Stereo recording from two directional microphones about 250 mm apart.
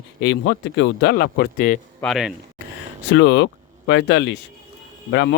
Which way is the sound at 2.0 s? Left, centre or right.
Centre.